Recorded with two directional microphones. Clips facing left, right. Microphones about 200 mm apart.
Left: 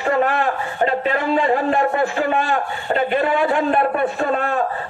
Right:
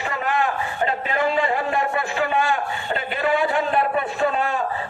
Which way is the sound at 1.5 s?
45° left (ahead or behind).